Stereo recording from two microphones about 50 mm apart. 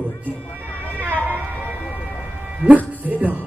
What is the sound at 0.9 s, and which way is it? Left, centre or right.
Vehicle, right.